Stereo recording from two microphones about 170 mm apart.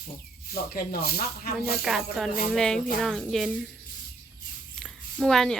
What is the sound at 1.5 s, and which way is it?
A woman's voice, 5° right (ahead or behind).